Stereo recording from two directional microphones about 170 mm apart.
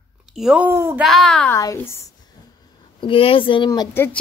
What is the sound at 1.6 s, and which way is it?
A woman's voice, 20° left (ahead or behind).